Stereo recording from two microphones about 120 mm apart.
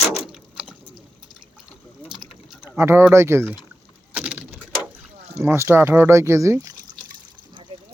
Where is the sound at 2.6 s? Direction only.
20° right (ahead or behind).